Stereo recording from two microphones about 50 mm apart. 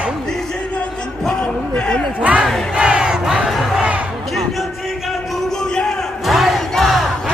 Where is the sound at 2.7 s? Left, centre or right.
Centre.